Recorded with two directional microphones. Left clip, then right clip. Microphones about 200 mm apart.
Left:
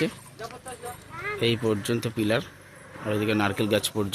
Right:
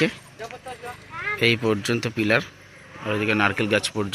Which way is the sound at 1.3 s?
5° right (ahead or behind).